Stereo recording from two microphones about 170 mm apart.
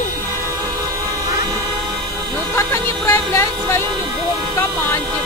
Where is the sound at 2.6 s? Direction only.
15° left (ahead or behind).